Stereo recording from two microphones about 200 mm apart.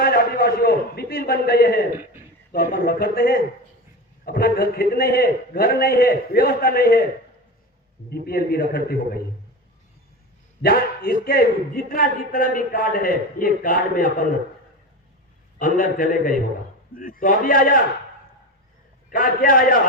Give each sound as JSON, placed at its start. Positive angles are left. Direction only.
{"t": 0.0, "sound": "a sound", "side_deg": 50}
{"t": 2.5, "sound": "a man's voice", "side_deg": 50}
{"t": 8.1, "sound": "a man's voice", "side_deg": 50}
{"t": 10.6, "sound": "a man's voice", "side_deg": 50}
{"t": 15.5, "sound": "a man's voice", "side_deg": 45}
{"t": 19.1, "sound": "a man's voice", "side_deg": 45}